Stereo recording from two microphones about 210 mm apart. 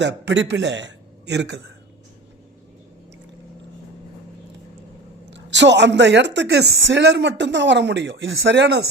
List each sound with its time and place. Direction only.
0.0 s a man's voice: 55° right (ahead or behind)
5.3 s a woman's voice: 55° right (ahead or behind)